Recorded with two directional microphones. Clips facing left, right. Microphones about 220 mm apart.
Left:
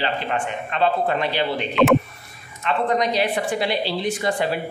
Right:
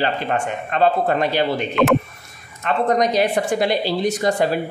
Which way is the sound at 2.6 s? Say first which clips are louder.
Right 3 dB; 45° right (ahead or behind).